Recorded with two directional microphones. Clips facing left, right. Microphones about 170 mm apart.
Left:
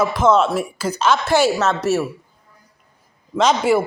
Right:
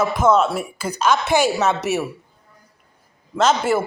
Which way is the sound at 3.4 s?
5° right (ahead or behind).